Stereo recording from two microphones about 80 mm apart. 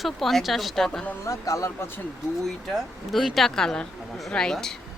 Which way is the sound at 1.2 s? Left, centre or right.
Left.